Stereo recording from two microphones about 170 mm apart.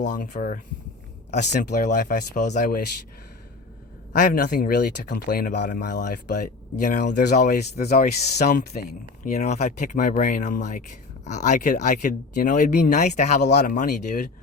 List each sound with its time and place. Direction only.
0.0 s speech: 50° left (ahead or behind)
1.7 s speech: 50° left (ahead or behind)
2.6 s speech: 65° left (ahead or behind)
4.1 s speech: 50° left (ahead or behind)
4.4 s speech: 65° left (ahead or behind)
5.1 s speech: 55° left (ahead or behind)
6.3 s speech: 45° left (ahead or behind)
7.0 s speech: 75° left (ahead or behind)
7.3 s speech: 45° left (ahead or behind)
8.4 s speech: 65° left (ahead or behind)
9.2 s speech: 40° left (ahead or behind)